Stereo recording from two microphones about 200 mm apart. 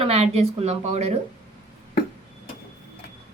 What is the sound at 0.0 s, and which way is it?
Speech, 30° right (ahead or behind).